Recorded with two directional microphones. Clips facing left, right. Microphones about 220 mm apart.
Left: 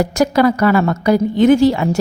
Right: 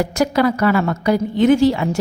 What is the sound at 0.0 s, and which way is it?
A woman's voice, 45° left (ahead or behind).